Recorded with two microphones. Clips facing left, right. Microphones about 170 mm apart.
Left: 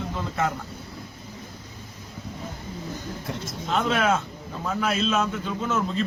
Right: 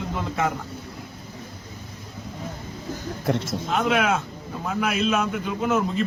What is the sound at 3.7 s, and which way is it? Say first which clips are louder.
A man's voice: right 1 dB; 10° right (ahead or behind).